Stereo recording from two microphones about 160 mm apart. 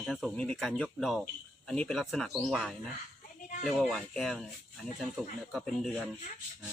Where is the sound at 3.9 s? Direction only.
5° left (ahead or behind).